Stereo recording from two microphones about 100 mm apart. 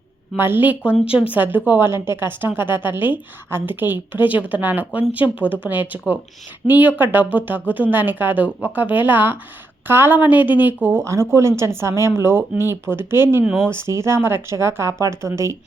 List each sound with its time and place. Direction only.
0.3 s a woman's voice: 20° right (ahead or behind)
11.0 s a woman's voice: 30° right (ahead or behind)